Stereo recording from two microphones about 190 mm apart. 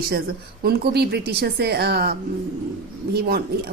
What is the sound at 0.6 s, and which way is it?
A woman's voice, 55° right (ahead or behind).